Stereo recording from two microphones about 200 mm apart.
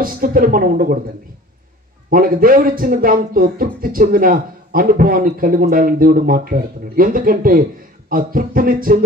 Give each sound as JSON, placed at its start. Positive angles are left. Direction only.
{"t": 0.0, "sound": "speech", "side_deg": -45}
{"t": 2.0, "sound": "speech", "side_deg": -45}